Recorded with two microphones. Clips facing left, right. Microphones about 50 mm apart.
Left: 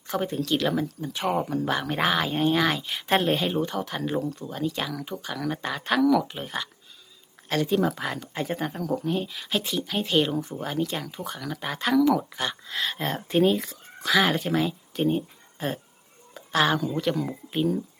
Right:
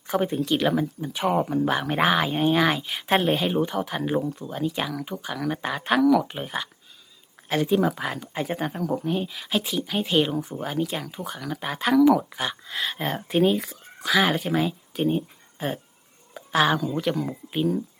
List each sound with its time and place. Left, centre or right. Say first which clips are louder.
0.1 s speech: right 3 dB; centre